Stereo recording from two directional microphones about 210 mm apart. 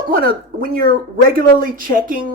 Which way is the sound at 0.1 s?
45° right (ahead or behind).